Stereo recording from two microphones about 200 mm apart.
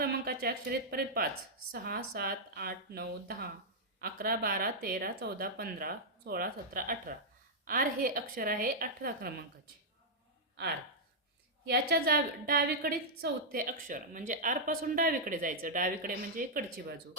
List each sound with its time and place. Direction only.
0.0 s a woman's voice: 50° right (ahead or behind)
11.7 s a woman's voice: 50° right (ahead or behind)